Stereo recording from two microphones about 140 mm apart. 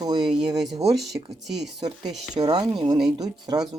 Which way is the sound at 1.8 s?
30° right (ahead or behind).